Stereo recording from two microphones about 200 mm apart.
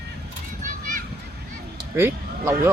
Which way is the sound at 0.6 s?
40° right (ahead or behind).